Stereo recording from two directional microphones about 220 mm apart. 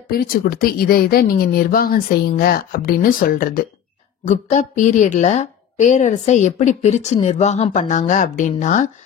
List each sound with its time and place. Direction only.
0.1 s a woman's voice: 40° left (ahead or behind)